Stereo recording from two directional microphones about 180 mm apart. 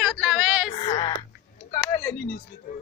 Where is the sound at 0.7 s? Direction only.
25° left (ahead or behind).